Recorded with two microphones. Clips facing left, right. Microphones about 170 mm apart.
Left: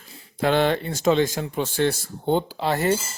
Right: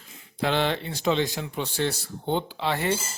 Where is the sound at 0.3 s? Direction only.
50° left (ahead or behind).